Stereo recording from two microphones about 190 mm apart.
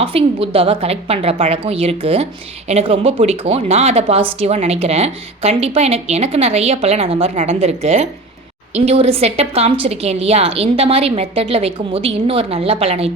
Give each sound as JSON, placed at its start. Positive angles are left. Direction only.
{"t": 0.0, "sound": "a woman's voice", "side_deg": -30}